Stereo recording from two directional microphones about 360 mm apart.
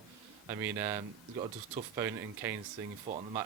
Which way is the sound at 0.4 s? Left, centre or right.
Centre.